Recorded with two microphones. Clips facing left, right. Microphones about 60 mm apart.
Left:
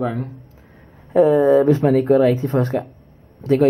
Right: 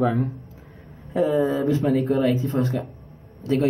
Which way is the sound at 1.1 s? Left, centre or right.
Left.